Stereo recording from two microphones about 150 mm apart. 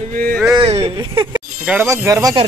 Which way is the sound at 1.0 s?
30° right (ahead or behind).